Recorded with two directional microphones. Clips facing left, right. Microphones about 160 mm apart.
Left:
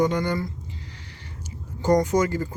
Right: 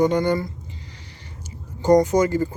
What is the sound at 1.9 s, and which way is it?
Speech, 20° right (ahead or behind).